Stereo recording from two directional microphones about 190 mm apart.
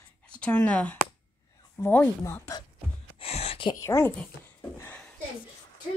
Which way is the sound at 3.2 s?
30° left (ahead or behind).